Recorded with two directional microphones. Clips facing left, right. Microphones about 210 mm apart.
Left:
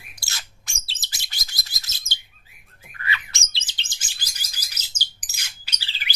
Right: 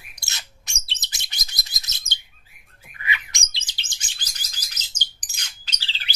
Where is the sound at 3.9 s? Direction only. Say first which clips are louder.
Even; 10° left (ahead or behind).